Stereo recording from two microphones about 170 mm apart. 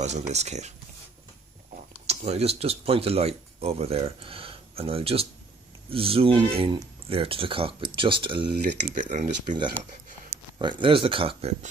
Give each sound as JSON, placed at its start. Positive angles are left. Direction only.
{"t": 0.0, "sound": "speech", "side_deg": -40}
{"t": 2.0, "sound": "speech", "side_deg": -40}
{"t": 8.5, "sound": "speech", "side_deg": -55}
{"t": 10.6, "sound": "speech", "side_deg": -30}